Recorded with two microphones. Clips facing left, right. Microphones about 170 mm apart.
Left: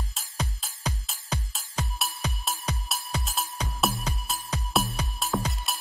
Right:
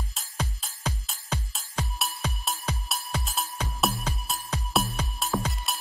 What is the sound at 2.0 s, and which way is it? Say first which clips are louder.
Music: even; centre (ahead or behind).